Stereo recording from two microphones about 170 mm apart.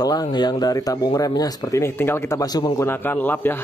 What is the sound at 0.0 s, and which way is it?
Speech, 25° left (ahead or behind).